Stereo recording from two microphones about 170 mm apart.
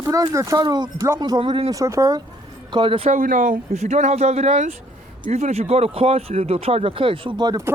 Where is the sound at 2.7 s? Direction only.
30° right (ahead or behind).